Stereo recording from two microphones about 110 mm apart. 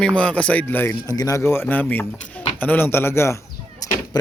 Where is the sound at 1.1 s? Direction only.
30° left (ahead or behind).